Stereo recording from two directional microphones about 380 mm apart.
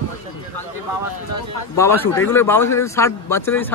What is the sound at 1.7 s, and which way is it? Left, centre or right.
Speech, centre.